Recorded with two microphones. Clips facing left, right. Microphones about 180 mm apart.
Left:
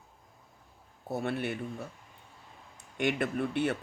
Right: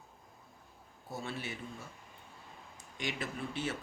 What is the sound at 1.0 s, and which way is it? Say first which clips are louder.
Speech: left 9 dB; 60° left (ahead or behind).